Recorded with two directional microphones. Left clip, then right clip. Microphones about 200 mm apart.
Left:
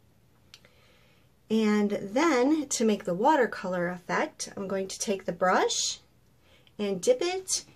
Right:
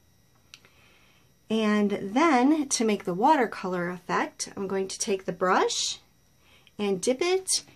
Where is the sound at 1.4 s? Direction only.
45° right (ahead or behind).